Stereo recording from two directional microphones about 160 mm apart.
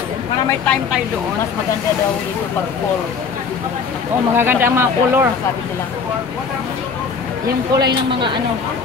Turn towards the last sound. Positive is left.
turn(degrees=-25)  # may be behind; listen again after turning